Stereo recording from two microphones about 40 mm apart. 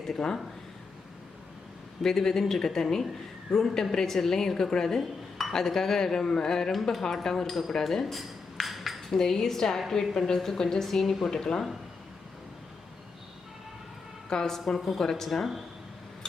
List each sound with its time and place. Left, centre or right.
0.1 s speech: centre
2.0 s speech: centre
7.7 s dishes: centre
9.1 s speech: centre
14.3 s a woman's voice: centre
14.5 s speech: centre